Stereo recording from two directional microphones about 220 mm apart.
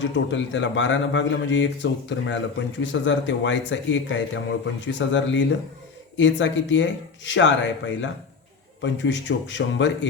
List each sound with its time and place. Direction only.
0.0 s a man's voice: 55° left (ahead or behind)